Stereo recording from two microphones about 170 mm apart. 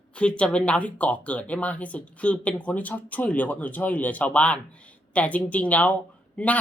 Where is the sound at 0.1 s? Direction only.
5° left (ahead or behind).